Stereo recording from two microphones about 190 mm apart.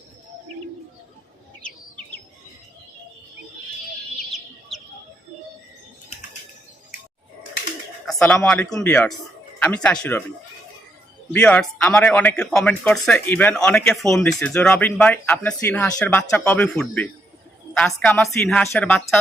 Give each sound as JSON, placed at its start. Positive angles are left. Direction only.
{"t": 8.0, "sound": "a man's voice", "side_deg": 5}
{"t": 11.3, "sound": "a man's voice", "side_deg": 10}